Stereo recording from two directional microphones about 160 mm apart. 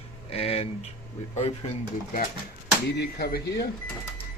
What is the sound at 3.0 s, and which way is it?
Speech, 80° left.